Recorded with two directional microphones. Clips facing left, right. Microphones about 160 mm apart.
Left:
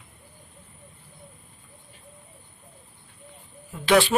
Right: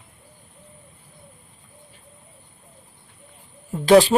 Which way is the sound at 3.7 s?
40° right (ahead or behind).